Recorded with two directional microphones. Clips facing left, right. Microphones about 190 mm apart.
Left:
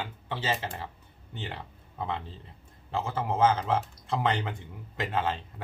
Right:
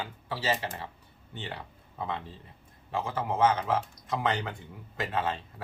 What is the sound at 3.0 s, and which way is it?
Speech, 25° left (ahead or behind).